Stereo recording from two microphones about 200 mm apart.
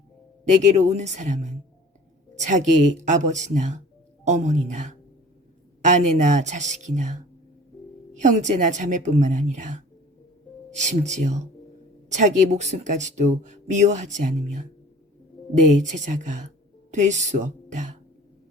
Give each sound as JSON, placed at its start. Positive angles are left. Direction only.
{"t": 0.4, "sound": "speech", "side_deg": -35}